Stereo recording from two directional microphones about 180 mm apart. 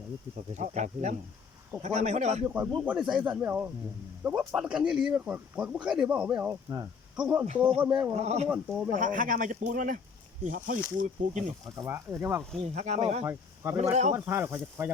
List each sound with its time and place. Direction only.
0.5 s speech: 40° right (ahead or behind)
2.4 s speech: 10° right (ahead or behind)
7.4 s speech: 35° right (ahead or behind)
7.9 s speech: 20° right (ahead or behind)
8.1 s speech: 35° right (ahead or behind)
8.4 s speech: 5° right (ahead or behind)
8.9 s speech: 45° right (ahead or behind)
11.6 s speech: 20° right (ahead or behind)
12.6 s speech: 40° right (ahead or behind)
13.2 s speech: 15° right (ahead or behind)